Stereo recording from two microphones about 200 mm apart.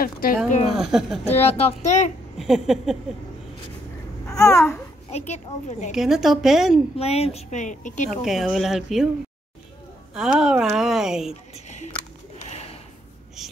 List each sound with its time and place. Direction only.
0.0 s speech: 45° left (ahead or behind)
0.7 s a woman's voice: centre (ahead or behind)
1.2 s a woman's voice: 30° left (ahead or behind)
2.3 s a woman's voice: centre (ahead or behind)
4.4 s babbling: 15° left (ahead or behind)
5.1 s a woman's voice: 35° left (ahead or behind)
5.9 s a woman's voice: centre (ahead or behind)
7.0 s a woman's voice: 30° left (ahead or behind)
8.1 s a woman's voice: centre (ahead or behind)
10.1 s a woman's voice: 5° right (ahead or behind)
11.5 s a sound: 35° left (ahead or behind)
12.4 s bird: 30° left (ahead or behind)
13.4 s a sound: centre (ahead or behind)